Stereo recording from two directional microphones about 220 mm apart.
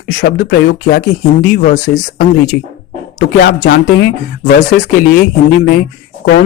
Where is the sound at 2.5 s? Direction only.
55° left (ahead or behind).